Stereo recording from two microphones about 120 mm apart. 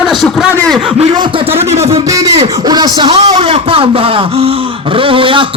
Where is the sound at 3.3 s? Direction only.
60° right (ahead or behind).